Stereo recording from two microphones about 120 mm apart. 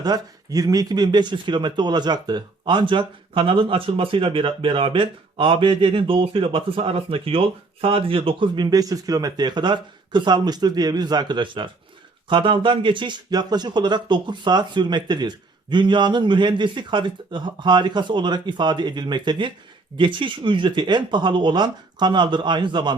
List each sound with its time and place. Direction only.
0.0 s speech: 30° right (ahead or behind)